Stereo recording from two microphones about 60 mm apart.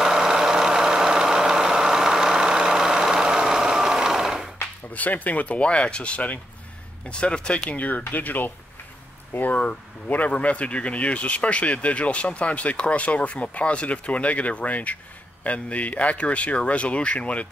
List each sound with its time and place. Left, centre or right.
0.0 s vehicle: centre
4.9 s speech: left
7.7 s speech: left